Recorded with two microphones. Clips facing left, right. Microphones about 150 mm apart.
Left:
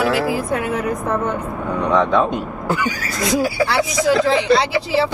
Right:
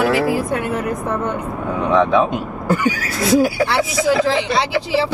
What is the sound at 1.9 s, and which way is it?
Speech, 5° right (ahead or behind).